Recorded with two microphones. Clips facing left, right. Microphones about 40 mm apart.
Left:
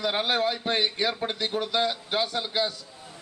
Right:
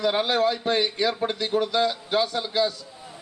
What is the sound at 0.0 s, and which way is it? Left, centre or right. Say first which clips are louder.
A man's voice: right 3 dB; centre.